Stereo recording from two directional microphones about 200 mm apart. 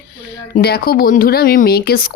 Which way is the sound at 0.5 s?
50° left (ahead or behind).